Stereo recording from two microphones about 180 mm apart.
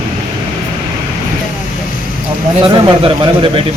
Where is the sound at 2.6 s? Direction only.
30° right (ahead or behind).